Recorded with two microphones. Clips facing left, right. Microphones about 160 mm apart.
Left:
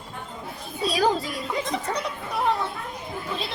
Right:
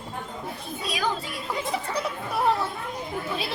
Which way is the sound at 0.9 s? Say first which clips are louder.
Left 6 dB; 35° left (ahead or behind).